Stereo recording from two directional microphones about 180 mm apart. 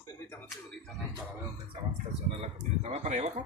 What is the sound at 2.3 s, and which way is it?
Speech, 35° right (ahead or behind).